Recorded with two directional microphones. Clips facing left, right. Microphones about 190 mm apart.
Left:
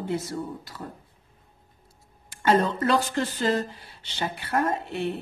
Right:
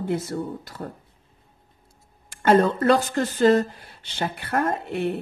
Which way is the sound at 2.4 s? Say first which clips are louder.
Right 4 dB; 50° right (ahead or behind).